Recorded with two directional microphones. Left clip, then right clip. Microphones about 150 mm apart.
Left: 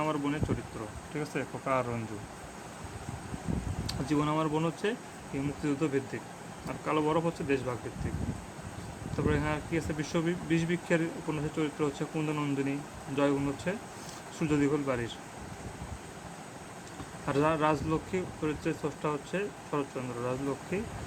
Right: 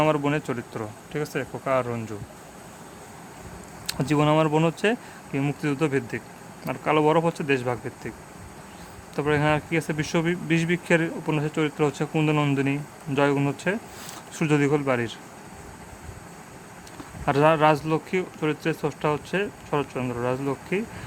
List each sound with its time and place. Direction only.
0.0 s speech: 60° right (ahead or behind)
1.1 s speech: 30° right (ahead or behind)
3.8 s speech: 60° right (ahead or behind)
9.1 s speech: 55° right (ahead or behind)
17.2 s speech: 50° right (ahead or behind)